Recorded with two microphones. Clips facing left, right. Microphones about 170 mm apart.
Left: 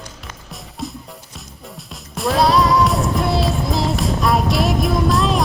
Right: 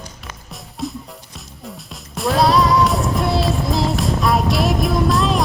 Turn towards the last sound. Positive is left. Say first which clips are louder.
# even
turn(degrees=0)  # may be behind; listen again after turning